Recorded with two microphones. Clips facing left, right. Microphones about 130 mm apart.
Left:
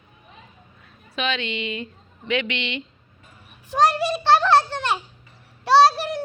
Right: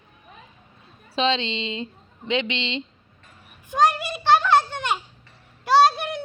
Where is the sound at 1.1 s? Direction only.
30° right (ahead or behind).